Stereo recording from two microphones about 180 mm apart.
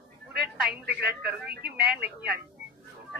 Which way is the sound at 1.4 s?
Centre (ahead or behind).